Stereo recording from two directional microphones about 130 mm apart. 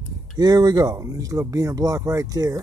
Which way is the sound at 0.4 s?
30° right (ahead or behind).